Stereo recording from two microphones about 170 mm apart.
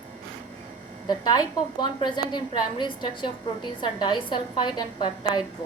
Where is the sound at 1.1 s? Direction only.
25° left (ahead or behind).